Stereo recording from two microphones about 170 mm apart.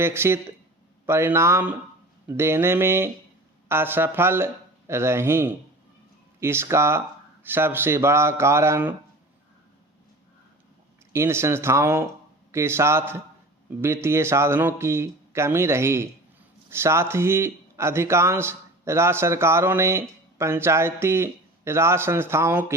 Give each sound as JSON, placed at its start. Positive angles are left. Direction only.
{"t": 0.0, "sound": "a man's voice", "side_deg": -15}
{"t": 11.1, "sound": "a man's voice", "side_deg": -15}